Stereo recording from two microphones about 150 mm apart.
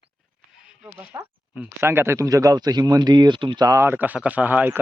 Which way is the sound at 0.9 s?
15° right (ahead or behind).